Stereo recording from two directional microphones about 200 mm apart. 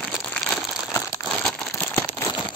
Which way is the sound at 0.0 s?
5° left (ahead or behind).